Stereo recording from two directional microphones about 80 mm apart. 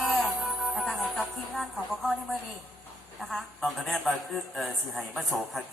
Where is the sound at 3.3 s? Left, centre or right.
Centre.